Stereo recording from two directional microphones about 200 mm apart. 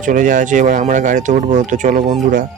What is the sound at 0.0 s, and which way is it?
Speech, 40° right (ahead or behind).